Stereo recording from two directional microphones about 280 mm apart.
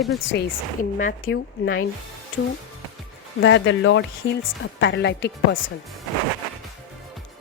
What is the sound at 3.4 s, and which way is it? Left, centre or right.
Speech, left.